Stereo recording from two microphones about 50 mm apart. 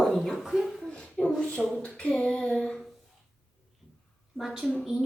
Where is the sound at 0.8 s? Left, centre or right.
Left.